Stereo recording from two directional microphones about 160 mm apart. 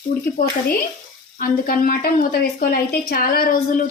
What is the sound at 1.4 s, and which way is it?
A woman's voice, 65° left (ahead or behind).